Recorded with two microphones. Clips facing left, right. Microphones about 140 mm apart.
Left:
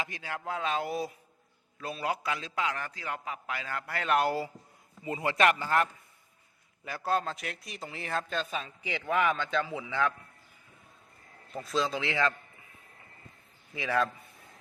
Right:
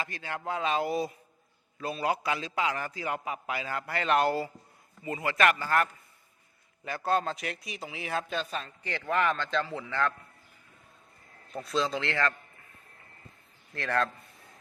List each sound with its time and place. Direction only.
0.0 s speech: 10° left (ahead or behind)
0.3 s a man's voice: centre (ahead or behind)
5.2 s speech: 30° left (ahead or behind)
5.6 s a man's voice: 15° left (ahead or behind)
6.8 s a man's voice: 5° left (ahead or behind)
11.5 s a man's voice: centre (ahead or behind)
13.7 s a man's voice: 5° left (ahead or behind)